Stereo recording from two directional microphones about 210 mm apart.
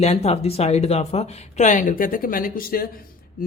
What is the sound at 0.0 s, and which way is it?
Speech, 30° left (ahead or behind).